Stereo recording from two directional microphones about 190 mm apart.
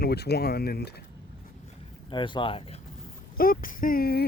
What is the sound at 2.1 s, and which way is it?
Speech, 25° left (ahead or behind).